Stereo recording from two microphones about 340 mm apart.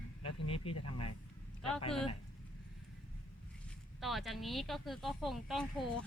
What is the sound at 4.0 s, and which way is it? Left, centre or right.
Speech, centre.